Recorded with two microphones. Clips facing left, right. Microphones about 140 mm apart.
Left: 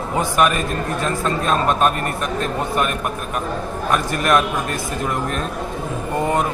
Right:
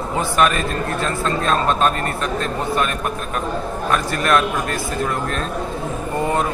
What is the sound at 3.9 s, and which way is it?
Speech, 15° left (ahead or behind).